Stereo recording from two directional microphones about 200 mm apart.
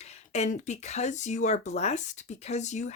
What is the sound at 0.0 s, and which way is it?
Speech, 35° left (ahead or behind).